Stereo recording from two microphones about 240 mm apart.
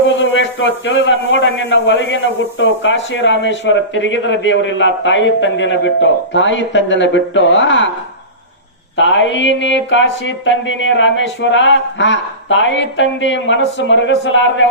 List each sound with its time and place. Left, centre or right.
0.1 s a man's voice: left
9.0 s a man's voice: left